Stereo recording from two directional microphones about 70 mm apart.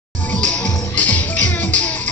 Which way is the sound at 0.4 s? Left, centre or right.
Centre.